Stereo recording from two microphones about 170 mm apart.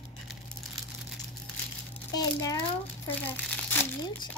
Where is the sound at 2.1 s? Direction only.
20° left (ahead or behind).